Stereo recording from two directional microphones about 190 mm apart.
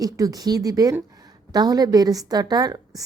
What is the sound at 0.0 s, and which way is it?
A woman's voice, 20° right (ahead or behind).